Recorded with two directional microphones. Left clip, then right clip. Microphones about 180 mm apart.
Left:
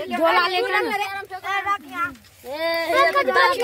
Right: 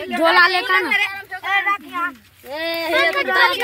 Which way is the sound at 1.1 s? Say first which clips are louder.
Right 5 dB; 60° left (ahead or behind).